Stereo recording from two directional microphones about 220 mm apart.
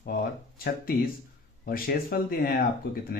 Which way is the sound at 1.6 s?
40° left (ahead or behind).